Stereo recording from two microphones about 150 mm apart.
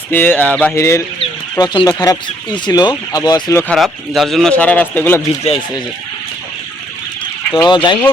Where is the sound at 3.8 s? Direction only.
Centre (ahead or behind).